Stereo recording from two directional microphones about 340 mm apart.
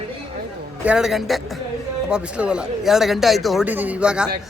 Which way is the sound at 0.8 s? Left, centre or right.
Centre.